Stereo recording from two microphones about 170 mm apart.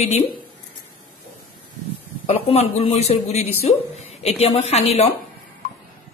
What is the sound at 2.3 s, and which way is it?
Speech, 35° left (ahead or behind).